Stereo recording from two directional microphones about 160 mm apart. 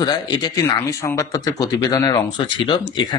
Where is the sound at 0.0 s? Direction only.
25° left (ahead or behind).